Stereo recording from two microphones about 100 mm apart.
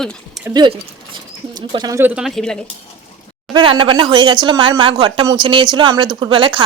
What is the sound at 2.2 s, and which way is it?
Speech, centre (ahead or behind).